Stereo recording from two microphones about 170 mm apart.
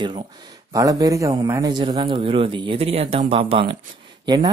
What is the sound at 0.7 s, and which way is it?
A man's voice, 20° right (ahead or behind).